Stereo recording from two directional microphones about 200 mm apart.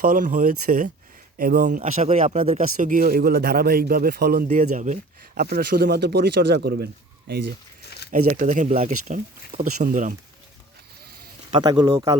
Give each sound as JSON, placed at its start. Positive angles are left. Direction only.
{"t": 0.1, "sound": "speech", "side_deg": -40}
{"t": 8.3, "sound": "speech", "side_deg": -40}
{"t": 11.5, "sound": "speech", "side_deg": -20}